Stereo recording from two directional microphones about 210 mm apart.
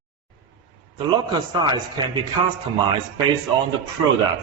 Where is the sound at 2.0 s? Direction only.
20° right (ahead or behind).